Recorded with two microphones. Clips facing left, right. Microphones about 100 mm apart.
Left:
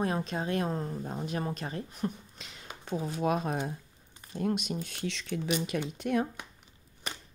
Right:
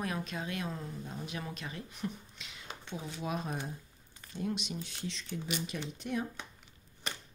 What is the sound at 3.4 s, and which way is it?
Speech, 70° left (ahead or behind).